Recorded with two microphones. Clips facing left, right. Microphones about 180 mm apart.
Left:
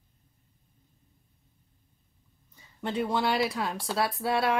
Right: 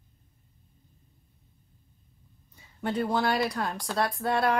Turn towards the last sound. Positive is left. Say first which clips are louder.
# right 1 dB
turn(degrees=5)  # may be behind; listen again after turning